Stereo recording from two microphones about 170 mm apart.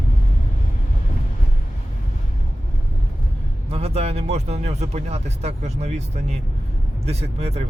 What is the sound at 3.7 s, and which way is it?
Speech, 35° right (ahead or behind).